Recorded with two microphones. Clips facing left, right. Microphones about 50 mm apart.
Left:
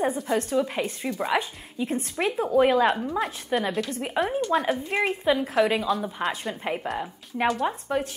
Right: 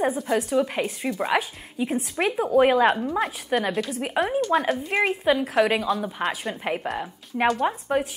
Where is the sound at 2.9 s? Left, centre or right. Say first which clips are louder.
Right 2 dB; centre.